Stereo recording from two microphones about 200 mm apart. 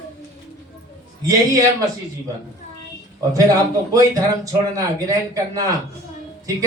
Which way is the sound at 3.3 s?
20° right (ahead or behind).